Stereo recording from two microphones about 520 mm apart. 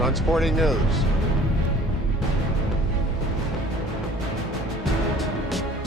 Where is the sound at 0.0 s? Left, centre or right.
Centre.